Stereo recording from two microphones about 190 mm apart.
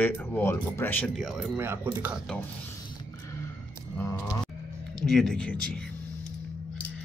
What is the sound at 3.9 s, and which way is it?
Livestock, 15° left (ahead or behind).